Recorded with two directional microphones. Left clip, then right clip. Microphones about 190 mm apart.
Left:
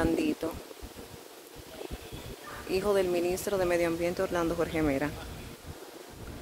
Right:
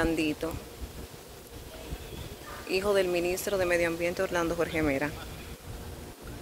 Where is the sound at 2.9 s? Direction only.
15° left (ahead or behind).